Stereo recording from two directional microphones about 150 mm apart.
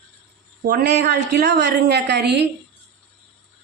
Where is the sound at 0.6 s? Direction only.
90° right.